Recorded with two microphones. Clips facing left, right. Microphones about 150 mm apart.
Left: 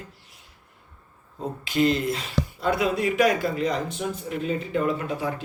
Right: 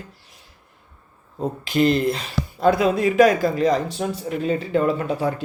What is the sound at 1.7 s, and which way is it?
Speech, 60° right (ahead or behind).